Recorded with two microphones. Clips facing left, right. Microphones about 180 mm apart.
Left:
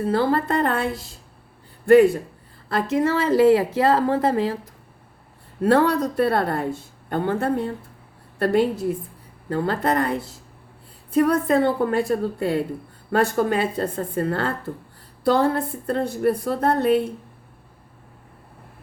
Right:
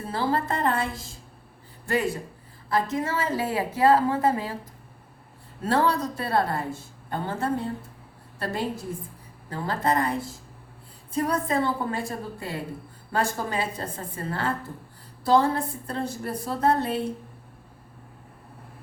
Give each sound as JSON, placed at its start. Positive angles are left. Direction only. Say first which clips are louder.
{"t": 0.1, "sound": "a woman's voice", "louder": "left 4 dB", "side_deg": 60}
{"t": 2.6, "sound": "speech", "louder": "left 5 dB", "side_deg": 70}
{"t": 5.6, "sound": "a woman's voice", "louder": "left 6 dB", "side_deg": 60}